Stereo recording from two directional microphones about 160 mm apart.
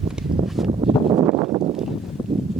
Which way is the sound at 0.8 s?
35° right (ahead or behind).